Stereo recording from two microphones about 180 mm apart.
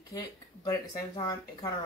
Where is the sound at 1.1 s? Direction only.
20° left (ahead or behind).